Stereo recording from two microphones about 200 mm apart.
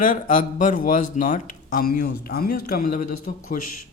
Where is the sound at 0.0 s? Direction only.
40° left (ahead or behind).